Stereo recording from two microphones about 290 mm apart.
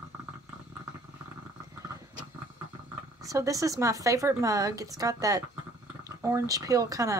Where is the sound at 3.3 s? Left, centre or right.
Centre.